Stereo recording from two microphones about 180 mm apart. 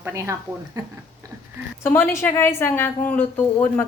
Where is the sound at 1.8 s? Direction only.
10° left (ahead or behind).